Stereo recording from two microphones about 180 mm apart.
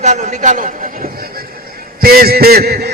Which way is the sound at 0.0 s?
40° right (ahead or behind).